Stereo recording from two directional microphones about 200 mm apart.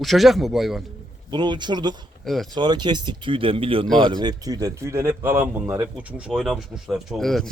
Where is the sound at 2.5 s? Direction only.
20° right (ahead or behind).